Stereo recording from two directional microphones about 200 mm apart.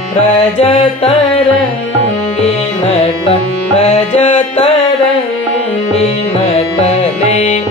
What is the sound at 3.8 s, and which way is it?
Music, 30° left (ahead or behind).